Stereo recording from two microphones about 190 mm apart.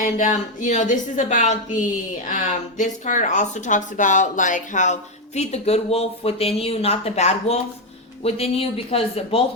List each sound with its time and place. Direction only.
0.0 s speech: 40° left (ahead or behind)